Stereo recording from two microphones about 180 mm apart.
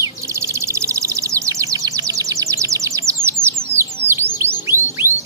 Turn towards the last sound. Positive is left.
turn(degrees=-15)  # may be behind; listen again after turning